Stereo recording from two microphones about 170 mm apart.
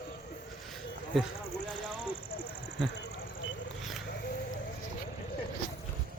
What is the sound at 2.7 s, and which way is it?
Speech, 90° left.